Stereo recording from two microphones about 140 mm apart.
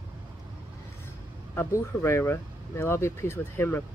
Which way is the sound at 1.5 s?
20° left (ahead or behind).